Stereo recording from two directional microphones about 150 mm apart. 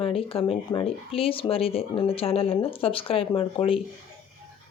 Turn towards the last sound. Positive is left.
turn(degrees=35)  # may be behind; listen again after turning